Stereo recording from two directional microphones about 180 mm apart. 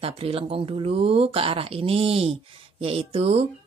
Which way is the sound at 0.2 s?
30° right (ahead or behind).